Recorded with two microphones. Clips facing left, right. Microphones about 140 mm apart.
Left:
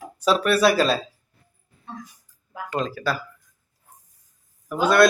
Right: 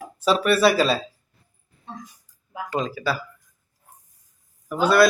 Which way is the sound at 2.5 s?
5° right (ahead or behind).